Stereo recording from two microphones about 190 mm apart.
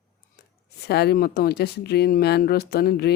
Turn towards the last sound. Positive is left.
turn(degrees=55)  # may be behind; listen again after turning